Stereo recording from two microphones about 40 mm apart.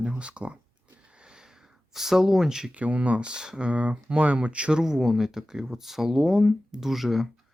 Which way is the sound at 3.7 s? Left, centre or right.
Right.